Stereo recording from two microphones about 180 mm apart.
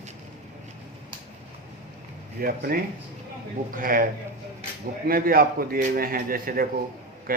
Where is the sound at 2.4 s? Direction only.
55° right (ahead or behind).